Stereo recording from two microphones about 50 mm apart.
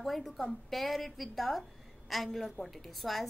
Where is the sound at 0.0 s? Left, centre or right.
Centre.